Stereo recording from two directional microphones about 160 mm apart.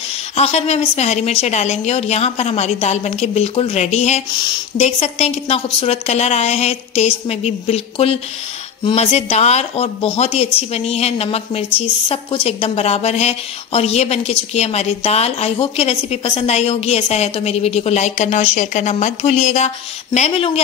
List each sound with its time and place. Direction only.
0.4 s a woman's voice: 40° left (ahead or behind)